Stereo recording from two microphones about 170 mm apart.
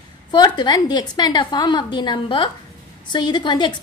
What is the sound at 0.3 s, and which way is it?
A woman's voice, 25° left (ahead or behind).